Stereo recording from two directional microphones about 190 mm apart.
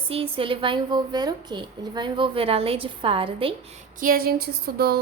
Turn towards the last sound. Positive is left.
turn(degrees=-55)  # may be behind; listen again after turning